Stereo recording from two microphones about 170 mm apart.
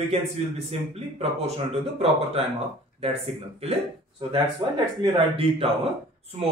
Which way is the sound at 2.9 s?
35° right (ahead or behind).